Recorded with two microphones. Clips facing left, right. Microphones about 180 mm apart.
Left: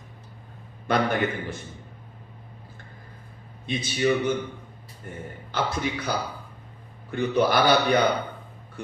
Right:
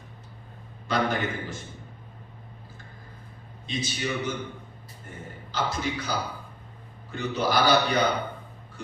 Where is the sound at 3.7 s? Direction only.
55° left (ahead or behind).